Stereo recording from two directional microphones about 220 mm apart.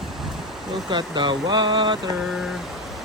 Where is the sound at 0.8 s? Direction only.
20° right (ahead or behind).